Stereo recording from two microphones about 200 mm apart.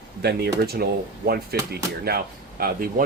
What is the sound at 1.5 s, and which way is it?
Speech, 50° right (ahead or behind).